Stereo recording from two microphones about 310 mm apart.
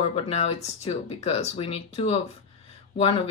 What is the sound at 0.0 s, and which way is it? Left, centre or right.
Speech, centre.